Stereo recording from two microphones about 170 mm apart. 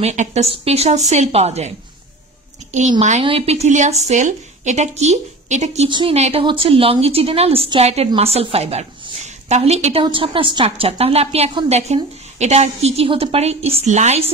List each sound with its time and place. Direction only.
0.0 s a woman's voice: 45° right (ahead or behind)
3.0 s a woman's voice: 40° right (ahead or behind)
5.9 s speech: 30° right (ahead or behind)
6.1 s a woman's voice: 40° right (ahead or behind)